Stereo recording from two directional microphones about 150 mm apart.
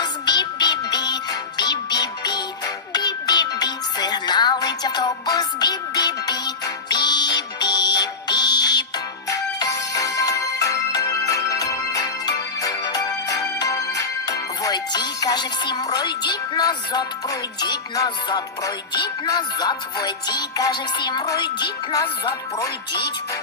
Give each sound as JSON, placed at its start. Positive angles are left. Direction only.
{"t": 0.0, "sound": "music", "side_deg": 30}